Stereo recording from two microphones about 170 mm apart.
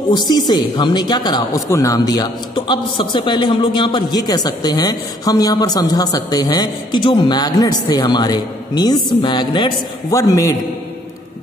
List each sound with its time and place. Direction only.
0.3 s a man's voice: 25° left (ahead or behind)